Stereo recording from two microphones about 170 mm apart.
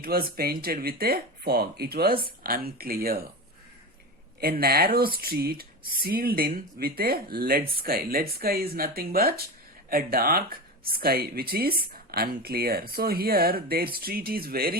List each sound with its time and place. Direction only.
0.0 s speech: 60° right (ahead or behind)
4.4 s speech: 60° right (ahead or behind)